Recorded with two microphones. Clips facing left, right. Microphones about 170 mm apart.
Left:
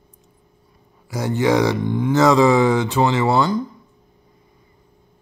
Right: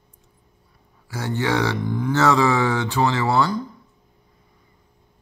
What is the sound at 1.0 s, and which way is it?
Speech, 15° left (ahead or behind).